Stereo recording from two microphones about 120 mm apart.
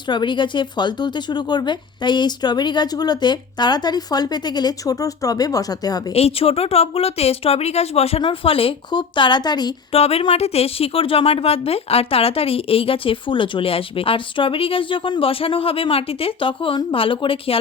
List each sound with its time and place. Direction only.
0.1 s speech: 40° left (ahead or behind)
6.1 s a woman's voice: 55° left (ahead or behind); by 9.7 s 35° left (ahead or behind)
9.9 s a woman's voice: 55° left (ahead or behind)